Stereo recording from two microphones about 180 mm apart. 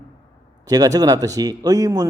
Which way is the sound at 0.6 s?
20° right (ahead or behind).